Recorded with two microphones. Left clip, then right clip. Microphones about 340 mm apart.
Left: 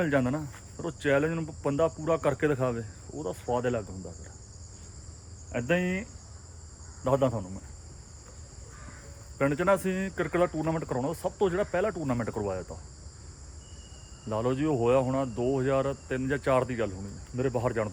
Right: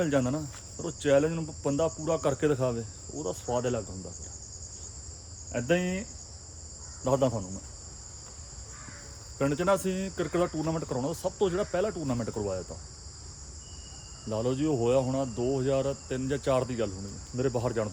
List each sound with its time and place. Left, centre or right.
0.0 s speech: centre
5.5 s speech: centre
9.4 s speech: centre
14.3 s speech: centre